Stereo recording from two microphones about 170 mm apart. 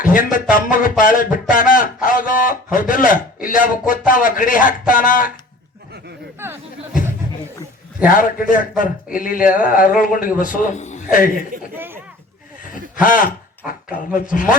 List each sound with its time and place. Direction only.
0.0 s speech: 55° left (ahead or behind)
6.4 s speech: 15° right (ahead or behind)
8.0 s speech: 55° left (ahead or behind)
9.6 s a sound: 55° left (ahead or behind)
10.3 s speech: 50° left (ahead or behind)
11.7 s a sound: 10° right (ahead or behind)
13.0 s speech: 50° left (ahead or behind)